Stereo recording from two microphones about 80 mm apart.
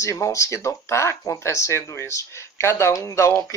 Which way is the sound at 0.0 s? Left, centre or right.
Left.